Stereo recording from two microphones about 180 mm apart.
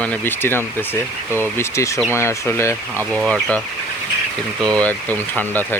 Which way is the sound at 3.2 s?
5° left (ahead or behind).